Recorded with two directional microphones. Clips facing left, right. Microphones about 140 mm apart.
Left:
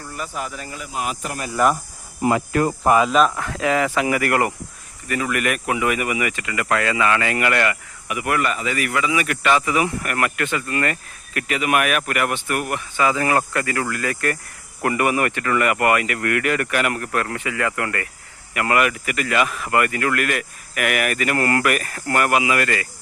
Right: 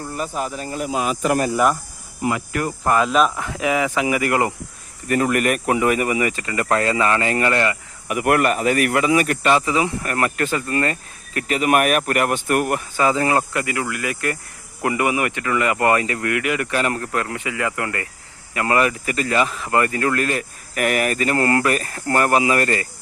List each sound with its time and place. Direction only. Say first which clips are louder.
0.1 s speech: right 3 dB; 30° right (ahead or behind)
2.2 s cricket: left 4 dB; 35° left (ahead or behind)
2.8 s speech: even; 5° left (ahead or behind)
3.3 s speech: even; 15° right (ahead or behind)
5.0 s speech: right 4 dB; 45° right (ahead or behind); by 7.8 s 25° right (ahead or behind)
8.0 s speech: right 4 dB; 45° right (ahead or behind)